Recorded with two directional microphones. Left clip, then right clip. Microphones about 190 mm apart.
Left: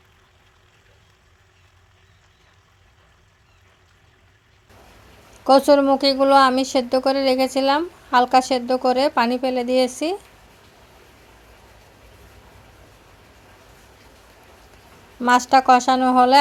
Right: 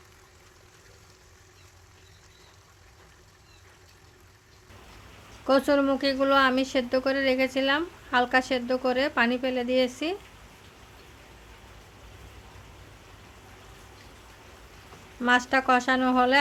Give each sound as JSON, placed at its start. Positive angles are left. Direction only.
{"t": 5.5, "sound": "speech", "side_deg": 25}
{"t": 15.2, "sound": "speech", "side_deg": 25}